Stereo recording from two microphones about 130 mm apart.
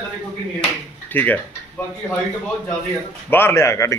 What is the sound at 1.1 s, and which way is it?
Speech, 10° left (ahead or behind).